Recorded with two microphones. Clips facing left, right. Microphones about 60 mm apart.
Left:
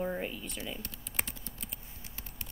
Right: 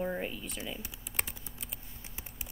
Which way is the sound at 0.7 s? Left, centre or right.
Centre.